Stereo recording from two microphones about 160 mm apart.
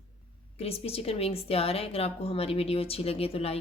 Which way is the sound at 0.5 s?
40° left (ahead or behind).